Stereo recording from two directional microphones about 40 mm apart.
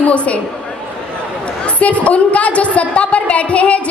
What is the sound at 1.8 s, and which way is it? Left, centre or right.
A woman's voice, left.